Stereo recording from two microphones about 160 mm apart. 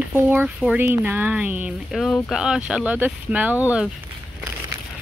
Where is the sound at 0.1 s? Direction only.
15° right (ahead or behind).